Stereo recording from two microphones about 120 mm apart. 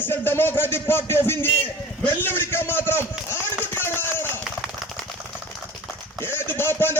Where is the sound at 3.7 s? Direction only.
20° left (ahead or behind).